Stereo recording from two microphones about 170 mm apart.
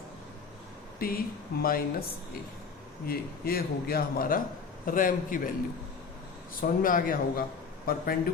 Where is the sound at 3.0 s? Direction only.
60° left (ahead or behind).